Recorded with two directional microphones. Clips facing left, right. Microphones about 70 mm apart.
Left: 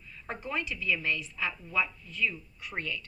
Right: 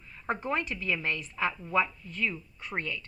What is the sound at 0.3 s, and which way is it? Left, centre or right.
A woman's voice, right.